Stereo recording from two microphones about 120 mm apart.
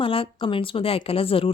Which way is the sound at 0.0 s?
50° left (ahead or behind).